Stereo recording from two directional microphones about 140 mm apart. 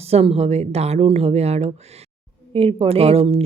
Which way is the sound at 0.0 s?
45° right (ahead or behind).